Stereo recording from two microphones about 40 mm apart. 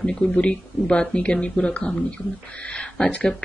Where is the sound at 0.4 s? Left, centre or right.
Left.